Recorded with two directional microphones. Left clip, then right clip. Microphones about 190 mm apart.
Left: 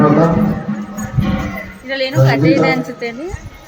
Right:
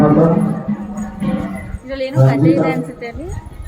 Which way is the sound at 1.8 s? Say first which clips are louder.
Left 2 dB; 40° left (ahead or behind).